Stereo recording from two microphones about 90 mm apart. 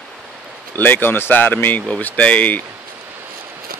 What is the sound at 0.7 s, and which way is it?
Speech, 20° left (ahead or behind).